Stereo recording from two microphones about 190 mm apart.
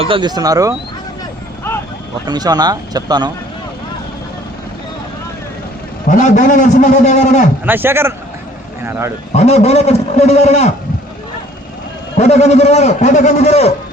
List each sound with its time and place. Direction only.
0.0 s speech: 25° right (ahead or behind)
2.2 s speech: 20° right (ahead or behind)
6.1 s a man's voice: 40° left (ahead or behind)
7.6 s a man's voice: 10° right (ahead or behind)
9.3 s a man's voice: 35° left (ahead or behind)
12.1 s a man's voice: 35° left (ahead or behind)